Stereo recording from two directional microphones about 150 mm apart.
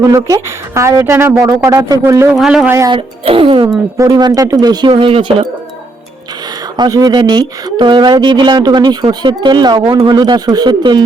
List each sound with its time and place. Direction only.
0.0 s speech: 25° right (ahead or behind)
2.3 s speech: centre (ahead or behind)
2.6 s speech: 20° right (ahead or behind)
2.9 s speech: 35° right (ahead or behind)
3.9 s speech: 25° right (ahead or behind)
6.7 s speech: 25° right (ahead or behind)